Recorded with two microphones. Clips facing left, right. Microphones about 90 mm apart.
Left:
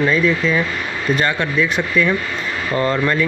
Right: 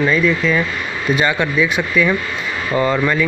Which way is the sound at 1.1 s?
10° right (ahead or behind).